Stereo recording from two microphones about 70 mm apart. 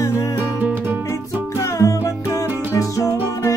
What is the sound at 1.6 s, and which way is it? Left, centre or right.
Music, left.